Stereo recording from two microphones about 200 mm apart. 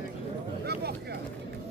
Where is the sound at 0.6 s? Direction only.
55° right (ahead or behind).